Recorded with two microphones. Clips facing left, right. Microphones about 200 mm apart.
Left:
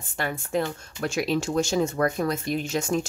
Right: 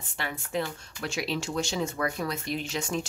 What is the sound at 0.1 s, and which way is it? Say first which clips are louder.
Speech: left 5 dB; 45° left (ahead or behind).